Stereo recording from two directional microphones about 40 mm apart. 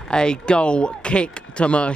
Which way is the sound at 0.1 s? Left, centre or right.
Left.